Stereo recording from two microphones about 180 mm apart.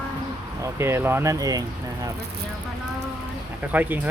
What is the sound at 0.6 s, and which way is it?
Speech, 15° right (ahead or behind).